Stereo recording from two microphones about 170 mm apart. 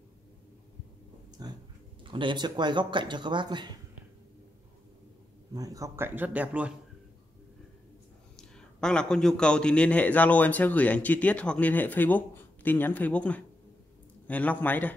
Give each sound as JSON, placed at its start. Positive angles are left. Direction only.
{"t": 1.4, "sound": "a sound", "side_deg": -25}
{"t": 2.0, "sound": "speech", "side_deg": -30}
{"t": 5.5, "sound": "speech", "side_deg": -20}
{"t": 8.4, "sound": "a man's voice", "side_deg": 5}